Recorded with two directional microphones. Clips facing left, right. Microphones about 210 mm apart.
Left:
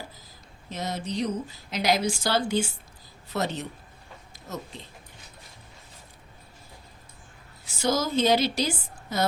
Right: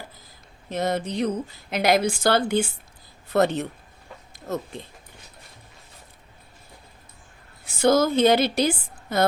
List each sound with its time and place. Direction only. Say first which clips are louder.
0.7 s speech: right 6 dB; 55° right (ahead or behind)
7.6 s a woman's voice: right 7 dB; 55° right (ahead or behind)